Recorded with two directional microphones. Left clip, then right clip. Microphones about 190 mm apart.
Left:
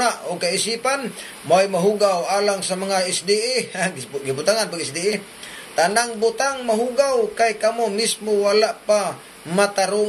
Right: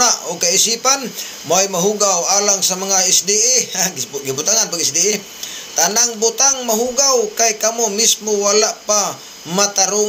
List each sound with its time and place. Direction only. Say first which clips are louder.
0.0 s a man's voice: right 5 dB; 5° left (ahead or behind)